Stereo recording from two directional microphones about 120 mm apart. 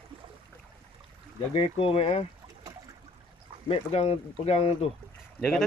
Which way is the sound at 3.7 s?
55° left (ahead or behind).